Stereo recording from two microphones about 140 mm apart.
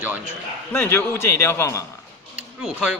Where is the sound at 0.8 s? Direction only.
15° left (ahead or behind).